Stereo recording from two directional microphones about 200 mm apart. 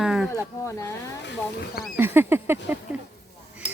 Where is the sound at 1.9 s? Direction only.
10° right (ahead or behind).